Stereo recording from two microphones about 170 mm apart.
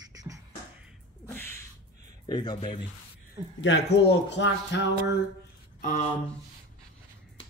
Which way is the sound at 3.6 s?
90° left.